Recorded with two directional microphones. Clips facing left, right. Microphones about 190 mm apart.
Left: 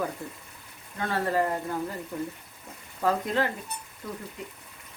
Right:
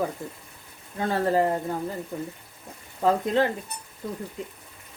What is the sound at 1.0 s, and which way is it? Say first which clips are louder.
Speech: right 4 dB; 30° right (ahead or behind).